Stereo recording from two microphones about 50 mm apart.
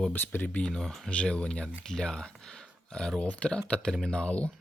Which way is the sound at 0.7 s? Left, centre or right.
Centre.